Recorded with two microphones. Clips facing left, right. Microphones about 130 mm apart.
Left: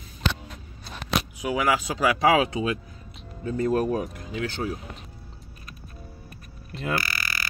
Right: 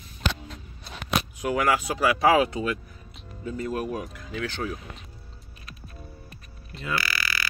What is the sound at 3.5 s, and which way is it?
Speech, 40° left (ahead or behind).